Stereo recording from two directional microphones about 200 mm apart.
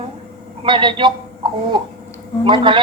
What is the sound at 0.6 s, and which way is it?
Speech, 25° right (ahead or behind).